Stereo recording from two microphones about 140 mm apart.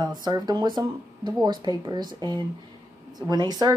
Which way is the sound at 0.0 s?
30° right (ahead or behind).